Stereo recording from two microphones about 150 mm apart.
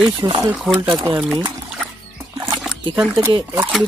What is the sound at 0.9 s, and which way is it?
Speech, 30° right (ahead or behind).